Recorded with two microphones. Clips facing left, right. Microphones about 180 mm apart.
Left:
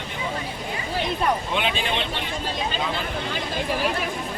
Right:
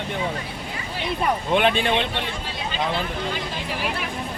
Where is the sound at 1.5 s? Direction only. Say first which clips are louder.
Right 6 dB; 55° right (ahead or behind).